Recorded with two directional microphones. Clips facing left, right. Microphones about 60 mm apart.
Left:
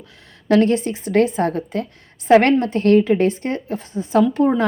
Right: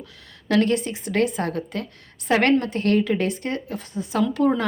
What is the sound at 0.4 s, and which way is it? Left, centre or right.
Speech, left.